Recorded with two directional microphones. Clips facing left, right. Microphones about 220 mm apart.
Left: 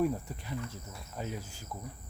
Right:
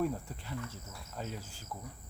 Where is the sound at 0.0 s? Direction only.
15° left (ahead or behind).